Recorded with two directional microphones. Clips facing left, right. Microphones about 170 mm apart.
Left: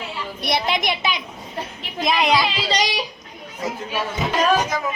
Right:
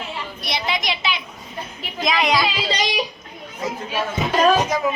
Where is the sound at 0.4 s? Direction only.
55° left (ahead or behind).